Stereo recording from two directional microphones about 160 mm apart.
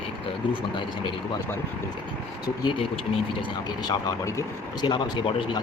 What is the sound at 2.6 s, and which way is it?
Speech, 35° left (ahead or behind).